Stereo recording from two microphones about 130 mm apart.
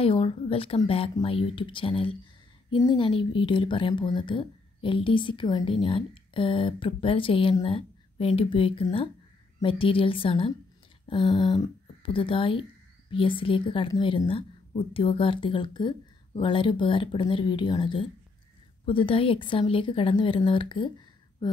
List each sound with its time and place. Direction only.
0.0 s speech: 45° left (ahead or behind)